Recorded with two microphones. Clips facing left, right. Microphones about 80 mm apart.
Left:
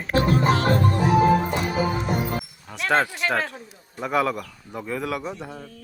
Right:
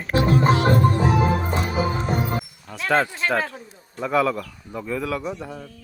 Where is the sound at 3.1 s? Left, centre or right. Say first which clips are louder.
Right 1 dB; right.